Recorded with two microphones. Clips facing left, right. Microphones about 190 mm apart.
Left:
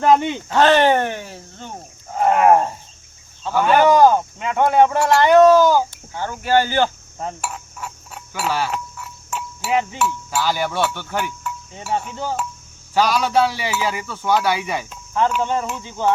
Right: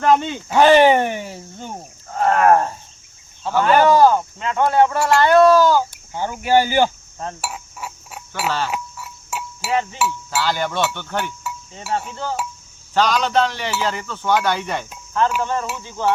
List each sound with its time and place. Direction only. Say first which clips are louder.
0.0 s speech: left 1 dB; 15° left (ahead or behind)
0.4 s speech: right 4 dB; 10° right (ahead or behind)
2.1 s a sound: left 1 dB; 15° left (ahead or behind)
5.9 s cricket: right 2 dB; 15° right (ahead or behind)
7.4 s a sound: even; 10° right (ahead or behind)
8.4 s speech: left 1 dB; 10° left (ahead or behind)
8.7 s chink: even; 5° right (ahead or behind)
9.6 s speech: left 1 dB; 15° left (ahead or behind)